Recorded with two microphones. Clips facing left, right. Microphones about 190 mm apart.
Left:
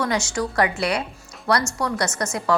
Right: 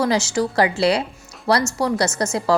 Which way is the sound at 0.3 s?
30° right (ahead or behind).